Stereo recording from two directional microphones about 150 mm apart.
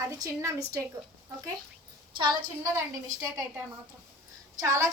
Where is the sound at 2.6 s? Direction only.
20° right (ahead or behind).